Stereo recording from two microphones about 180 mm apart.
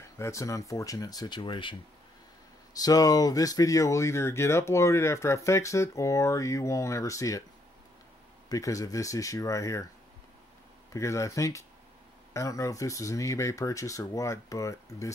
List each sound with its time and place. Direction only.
0.2 s speech: 15° left (ahead or behind)
2.8 s speech: 20° left (ahead or behind)
8.5 s speech: 20° left (ahead or behind)
10.9 s speech: 15° left (ahead or behind)